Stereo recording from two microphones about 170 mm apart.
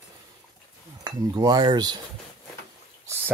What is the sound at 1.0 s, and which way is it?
Speech, 25° right (ahead or behind).